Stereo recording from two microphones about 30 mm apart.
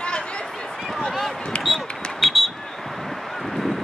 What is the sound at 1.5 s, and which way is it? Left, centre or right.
Basketball bounce, left.